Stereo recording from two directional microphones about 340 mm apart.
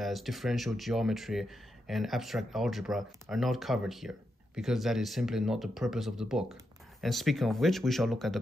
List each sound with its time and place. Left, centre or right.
0.0 s speech: centre